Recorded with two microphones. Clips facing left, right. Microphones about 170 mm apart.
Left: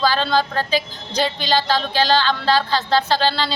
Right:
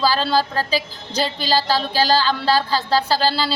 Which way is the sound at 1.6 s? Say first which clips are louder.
Even; 35° right (ahead or behind).